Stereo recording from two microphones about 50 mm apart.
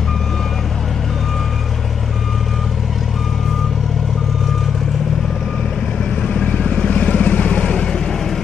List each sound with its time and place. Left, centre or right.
6.2 s vehicle: centre